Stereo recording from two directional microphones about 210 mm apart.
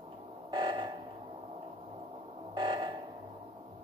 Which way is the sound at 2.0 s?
25° right (ahead or behind).